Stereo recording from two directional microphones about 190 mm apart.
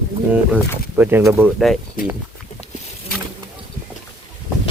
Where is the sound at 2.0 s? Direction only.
45° left (ahead or behind).